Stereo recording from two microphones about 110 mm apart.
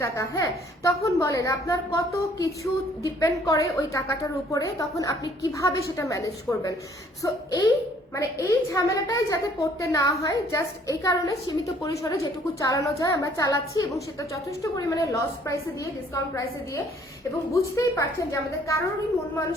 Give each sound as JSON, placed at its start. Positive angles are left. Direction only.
{"t": 0.0, "sound": "a woman's voice", "side_deg": 30}